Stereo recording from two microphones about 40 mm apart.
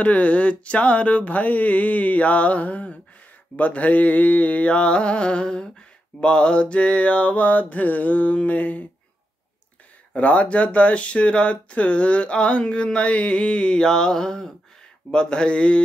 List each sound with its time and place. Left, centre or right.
0.0 s speech: left
8.4 s mantra: left
10.1 s speech: left